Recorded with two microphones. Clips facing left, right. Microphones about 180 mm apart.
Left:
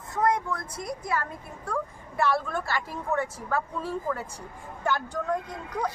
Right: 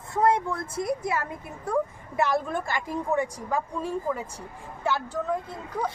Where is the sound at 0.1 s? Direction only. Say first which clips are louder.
Right 3 dB; 30° right (ahead or behind).